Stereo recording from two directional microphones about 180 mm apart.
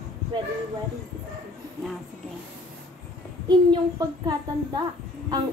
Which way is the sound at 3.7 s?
25° right (ahead or behind).